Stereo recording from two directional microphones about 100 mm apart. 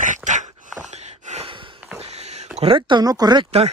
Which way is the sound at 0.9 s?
75° right (ahead or behind).